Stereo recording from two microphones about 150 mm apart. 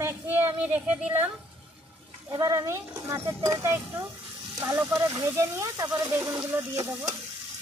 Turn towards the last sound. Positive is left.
turn(degrees=-20)  # may be behind; listen again after turning